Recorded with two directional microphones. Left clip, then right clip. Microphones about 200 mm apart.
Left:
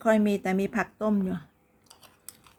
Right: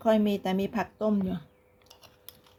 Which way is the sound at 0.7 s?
20° left (ahead or behind).